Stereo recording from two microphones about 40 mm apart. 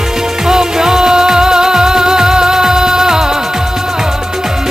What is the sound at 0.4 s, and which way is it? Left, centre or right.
Music, centre.